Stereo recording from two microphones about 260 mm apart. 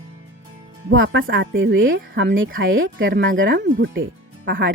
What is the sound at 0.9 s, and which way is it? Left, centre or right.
Speech, right.